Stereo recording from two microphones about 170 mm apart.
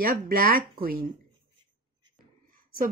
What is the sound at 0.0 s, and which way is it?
Speech, 55° right (ahead or behind).